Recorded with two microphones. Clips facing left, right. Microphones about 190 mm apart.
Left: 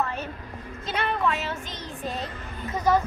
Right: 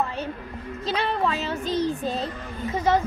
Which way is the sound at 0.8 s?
35° right (ahead or behind).